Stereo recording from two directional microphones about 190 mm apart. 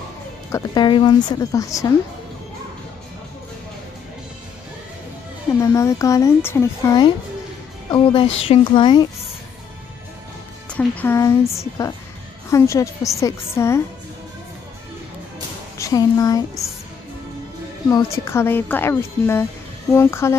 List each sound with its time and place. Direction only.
0.5 s speech: 20° left (ahead or behind)
5.6 s speech: 15° left (ahead or behind)
10.7 s speech: 5° left (ahead or behind)
15.8 s speech: 20° left (ahead or behind)
17.8 s speech: 15° left (ahead or behind)